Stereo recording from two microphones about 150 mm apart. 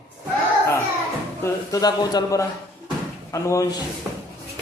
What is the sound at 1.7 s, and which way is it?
Speech, 25° left (ahead or behind).